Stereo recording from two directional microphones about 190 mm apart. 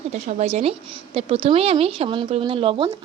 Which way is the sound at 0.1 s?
35° right (ahead or behind).